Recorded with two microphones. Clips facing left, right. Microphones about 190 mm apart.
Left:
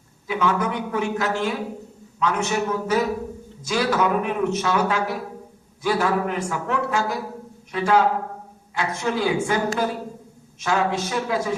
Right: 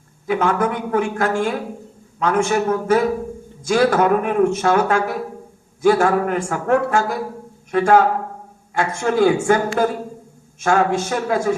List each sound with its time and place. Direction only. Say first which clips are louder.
0.3 s a man's voice: right 4 dB; 50° right (ahead or behind)
10.6 s a man's voice: right 5 dB; 50° right (ahead or behind)